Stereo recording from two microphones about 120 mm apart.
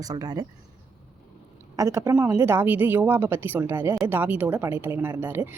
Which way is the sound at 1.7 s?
25° right (ahead or behind).